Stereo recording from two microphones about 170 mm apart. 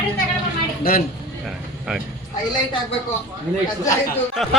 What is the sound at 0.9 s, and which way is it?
Speech, 60° left (ahead or behind).